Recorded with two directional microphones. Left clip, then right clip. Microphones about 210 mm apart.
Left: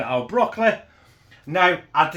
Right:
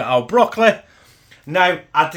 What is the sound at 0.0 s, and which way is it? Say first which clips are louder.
Speech: right 6 dB; 60° right (ahead or behind).